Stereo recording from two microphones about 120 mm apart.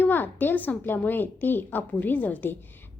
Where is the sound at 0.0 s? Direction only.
15° left (ahead or behind).